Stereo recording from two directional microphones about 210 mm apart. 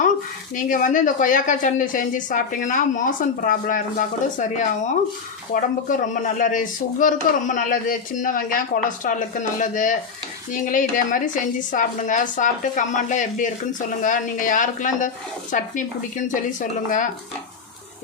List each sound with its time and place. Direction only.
0.5 s speech: 40° left (ahead or behind)